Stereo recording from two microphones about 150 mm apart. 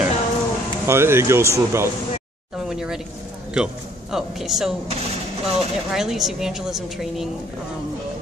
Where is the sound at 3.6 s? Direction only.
5° right (ahead or behind).